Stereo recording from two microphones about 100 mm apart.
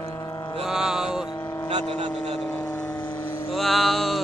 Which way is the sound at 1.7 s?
90° right.